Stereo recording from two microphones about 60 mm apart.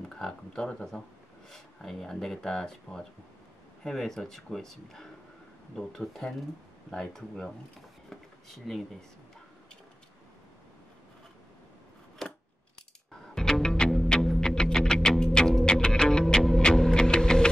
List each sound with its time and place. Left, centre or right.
0.1 s speech: centre
8.1 s a sound: centre
12.2 s scissors: centre
13.3 s music: centre